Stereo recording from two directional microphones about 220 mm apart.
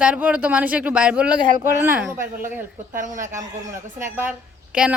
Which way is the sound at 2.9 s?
35° right (ahead or behind).